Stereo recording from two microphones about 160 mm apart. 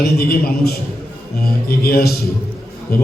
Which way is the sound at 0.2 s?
70° left (ahead or behind).